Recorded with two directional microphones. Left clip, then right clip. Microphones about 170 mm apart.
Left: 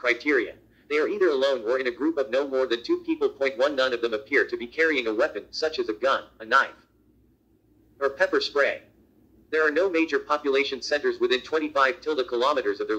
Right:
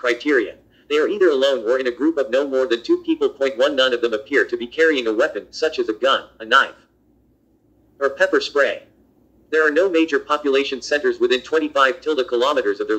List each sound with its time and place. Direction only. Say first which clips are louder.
0.0 s speech: right 5 dB; 20° right (ahead or behind)
8.0 s speech: right 6 dB; 20° right (ahead or behind)